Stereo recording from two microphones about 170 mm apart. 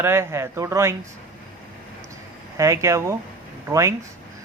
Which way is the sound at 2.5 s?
15° right (ahead or behind).